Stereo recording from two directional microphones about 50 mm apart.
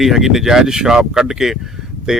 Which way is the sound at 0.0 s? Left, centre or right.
Centre.